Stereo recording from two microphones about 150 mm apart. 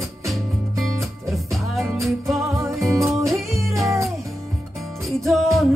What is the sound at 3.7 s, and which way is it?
Music, 20° right (ahead or behind).